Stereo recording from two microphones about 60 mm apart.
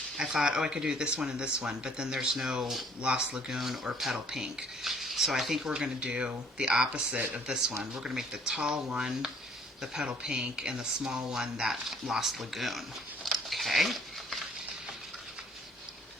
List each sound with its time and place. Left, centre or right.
0.2 s speech: centre
5.7 s speech: centre
13.2 s a sound: centre